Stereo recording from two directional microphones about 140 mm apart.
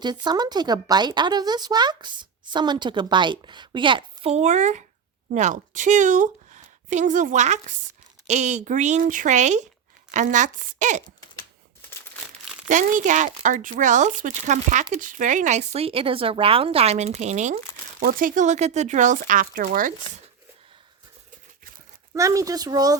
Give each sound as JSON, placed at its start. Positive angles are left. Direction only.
{"t": 0.0, "sound": "a woman's voice", "side_deg": -30}
{"t": 12.6, "sound": "speech", "side_deg": -65}
{"t": 18.0, "sound": "speech", "side_deg": -85}
{"t": 22.1, "sound": "speech", "side_deg": -25}